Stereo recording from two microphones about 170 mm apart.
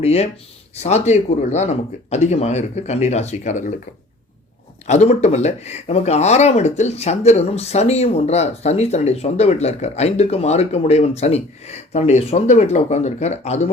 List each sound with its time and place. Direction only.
0.0 s speech: 40° left (ahead or behind)
4.9 s speech: 40° left (ahead or behind)